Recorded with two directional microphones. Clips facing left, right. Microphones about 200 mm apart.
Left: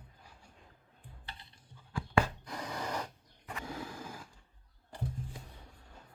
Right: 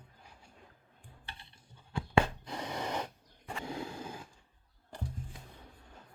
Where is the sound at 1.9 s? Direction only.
25° right (ahead or behind).